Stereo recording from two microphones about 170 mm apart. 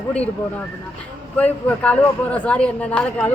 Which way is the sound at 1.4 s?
10° left (ahead or behind).